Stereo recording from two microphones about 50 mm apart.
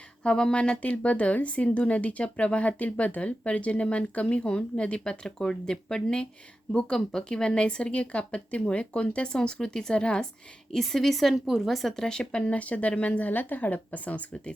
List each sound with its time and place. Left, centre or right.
0.2 s speech: centre
10.7 s a woman's voice: centre
11.4 s a woman's voice: centre; by 14.5 s left